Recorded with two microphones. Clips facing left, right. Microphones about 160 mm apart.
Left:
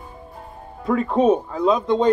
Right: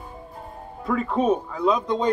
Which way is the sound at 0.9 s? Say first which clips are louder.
Left 4 dB; 25° left (ahead or behind).